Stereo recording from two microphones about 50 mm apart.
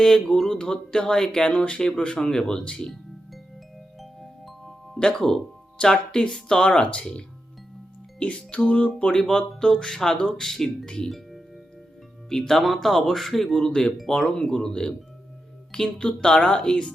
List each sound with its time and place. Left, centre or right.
0.0 s speech: centre
1.8 s speech: centre
4.0 s music: centre
4.9 s speech: centre
11.1 s music: centre
12.3 s speech: centre